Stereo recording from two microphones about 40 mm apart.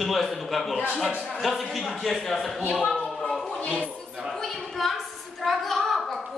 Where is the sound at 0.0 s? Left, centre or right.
Centre.